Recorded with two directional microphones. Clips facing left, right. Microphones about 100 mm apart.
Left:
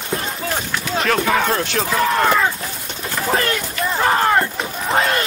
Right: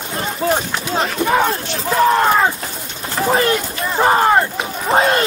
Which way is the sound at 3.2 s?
20° right (ahead or behind).